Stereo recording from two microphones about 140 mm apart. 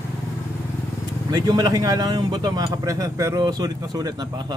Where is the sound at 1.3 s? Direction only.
30° right (ahead or behind).